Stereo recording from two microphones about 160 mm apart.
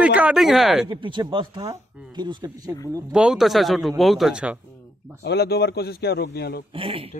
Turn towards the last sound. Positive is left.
turn(degrees=-35)  # may be behind; listen again after turning